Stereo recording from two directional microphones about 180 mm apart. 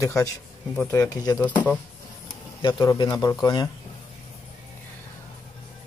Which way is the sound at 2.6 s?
25° left (ahead or behind).